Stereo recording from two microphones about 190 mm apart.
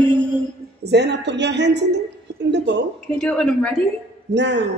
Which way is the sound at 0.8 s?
60° right (ahead or behind).